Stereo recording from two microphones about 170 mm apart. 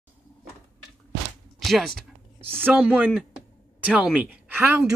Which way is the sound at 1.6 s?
Centre (ahead or behind).